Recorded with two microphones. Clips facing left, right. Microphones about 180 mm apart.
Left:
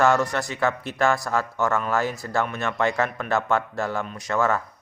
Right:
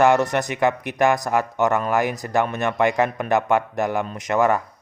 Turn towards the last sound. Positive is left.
turn(degrees=-15)  # may be behind; listen again after turning